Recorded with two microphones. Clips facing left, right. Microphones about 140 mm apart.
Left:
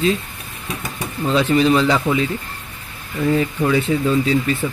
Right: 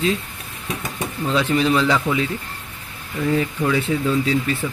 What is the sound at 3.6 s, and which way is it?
Speech, 25° left (ahead or behind).